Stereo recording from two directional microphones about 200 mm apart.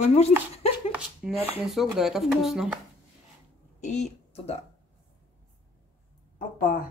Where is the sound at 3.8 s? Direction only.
35° left (ahead or behind).